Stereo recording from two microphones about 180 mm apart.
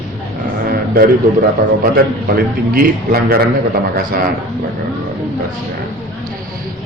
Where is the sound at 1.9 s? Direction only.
55° right (ahead or behind).